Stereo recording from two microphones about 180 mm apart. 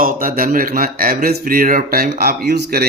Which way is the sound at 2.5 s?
65° right (ahead or behind).